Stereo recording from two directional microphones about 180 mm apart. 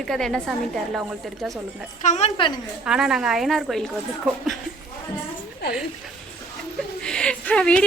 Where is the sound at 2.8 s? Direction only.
5° right (ahead or behind).